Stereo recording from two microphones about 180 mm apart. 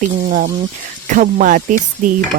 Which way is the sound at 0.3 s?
50° right (ahead or behind).